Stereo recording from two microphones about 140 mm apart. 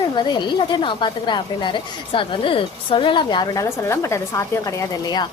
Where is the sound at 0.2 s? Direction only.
30° left (ahead or behind).